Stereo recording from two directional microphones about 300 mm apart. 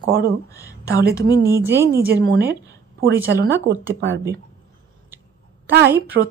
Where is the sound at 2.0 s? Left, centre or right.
Right.